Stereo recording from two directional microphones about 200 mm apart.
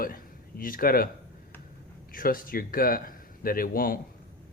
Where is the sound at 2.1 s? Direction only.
45° left (ahead or behind).